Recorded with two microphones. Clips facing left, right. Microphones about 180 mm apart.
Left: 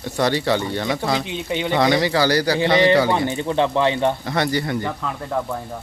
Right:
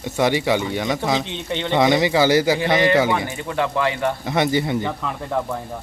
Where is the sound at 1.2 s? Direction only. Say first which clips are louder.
Left 1 dB; 10° left (ahead or behind).